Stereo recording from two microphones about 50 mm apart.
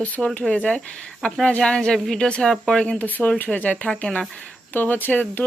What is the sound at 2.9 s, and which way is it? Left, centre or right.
Speech, left.